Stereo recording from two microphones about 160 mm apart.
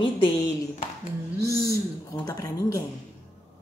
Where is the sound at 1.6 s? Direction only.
25° left (ahead or behind).